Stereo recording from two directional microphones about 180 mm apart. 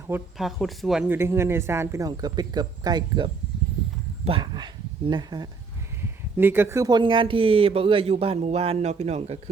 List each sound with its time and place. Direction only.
0.3 s speech: centre (ahead or behind); by 3.2 s 25° right (ahead or behind)
4.3 s speech: 25° right (ahead or behind)
6.0 s speech: 10° right (ahead or behind); by 9.4 s 35° right (ahead or behind)